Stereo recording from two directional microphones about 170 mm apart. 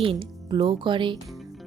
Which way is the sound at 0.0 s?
30° right (ahead or behind).